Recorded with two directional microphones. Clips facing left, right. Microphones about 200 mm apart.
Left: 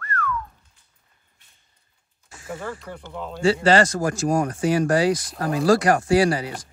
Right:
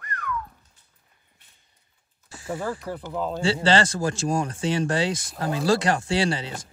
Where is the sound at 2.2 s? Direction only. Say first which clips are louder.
Right 3 dB; 30° right (ahead or behind).